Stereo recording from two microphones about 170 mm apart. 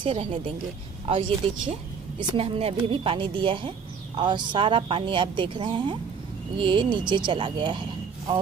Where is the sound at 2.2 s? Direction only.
35° right (ahead or behind).